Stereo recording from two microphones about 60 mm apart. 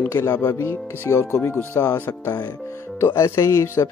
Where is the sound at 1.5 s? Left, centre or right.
Left.